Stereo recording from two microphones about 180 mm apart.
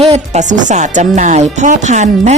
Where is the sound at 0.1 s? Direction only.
40° right (ahead or behind).